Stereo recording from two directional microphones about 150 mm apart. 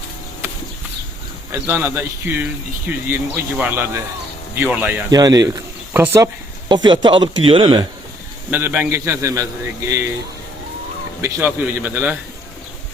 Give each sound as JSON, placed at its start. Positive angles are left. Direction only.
{"t": 1.5, "sound": "a man's voice", "side_deg": -15}
{"t": 5.1, "sound": "speech", "side_deg": -25}
{"t": 6.7, "sound": "a man's voice", "side_deg": -30}
{"t": 8.4, "sound": "a man's voice", "side_deg": -10}
{"t": 11.2, "sound": "a man's voice", "side_deg": -15}